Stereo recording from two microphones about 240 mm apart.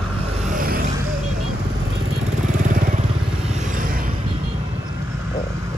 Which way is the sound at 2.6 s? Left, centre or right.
Right.